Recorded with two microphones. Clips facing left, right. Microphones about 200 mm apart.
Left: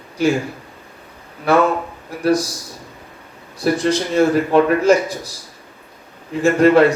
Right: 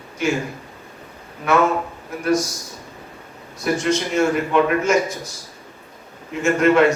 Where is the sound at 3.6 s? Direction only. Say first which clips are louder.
Left 3 dB; 35° left (ahead or behind).